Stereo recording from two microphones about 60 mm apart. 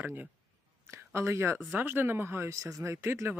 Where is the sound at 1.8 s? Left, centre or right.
Right.